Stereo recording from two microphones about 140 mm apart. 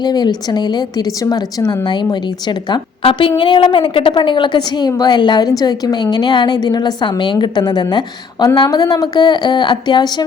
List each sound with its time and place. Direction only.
0.0 s a woman's voice: 30° left (ahead or behind)